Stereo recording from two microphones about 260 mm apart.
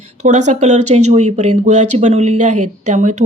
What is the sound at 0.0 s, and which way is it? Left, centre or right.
Speech, right.